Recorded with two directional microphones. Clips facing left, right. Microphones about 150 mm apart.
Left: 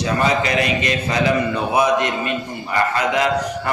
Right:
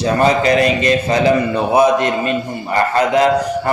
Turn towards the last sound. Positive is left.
turn(degrees=-35)  # may be behind; listen again after turning